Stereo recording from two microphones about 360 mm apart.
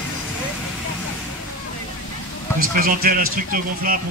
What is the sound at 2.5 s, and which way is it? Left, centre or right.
A man's voice, right.